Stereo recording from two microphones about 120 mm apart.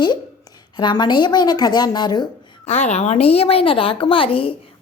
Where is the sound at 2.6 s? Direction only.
70° left (ahead or behind).